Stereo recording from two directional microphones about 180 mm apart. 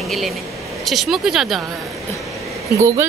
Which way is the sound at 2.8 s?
15° right (ahead or behind).